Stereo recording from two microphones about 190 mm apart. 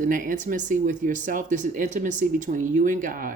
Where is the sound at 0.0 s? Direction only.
45° right (ahead or behind).